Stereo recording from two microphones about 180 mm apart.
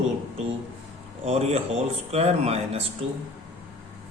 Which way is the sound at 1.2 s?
35° right (ahead or behind).